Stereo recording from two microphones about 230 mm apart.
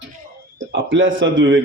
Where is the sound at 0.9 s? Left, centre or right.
Right.